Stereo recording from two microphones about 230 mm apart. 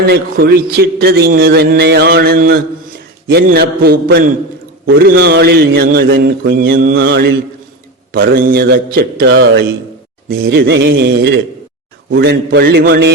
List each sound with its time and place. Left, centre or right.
0.1 s a man's voice: right
6.9 s mantra: right
8.2 s a man's voice: right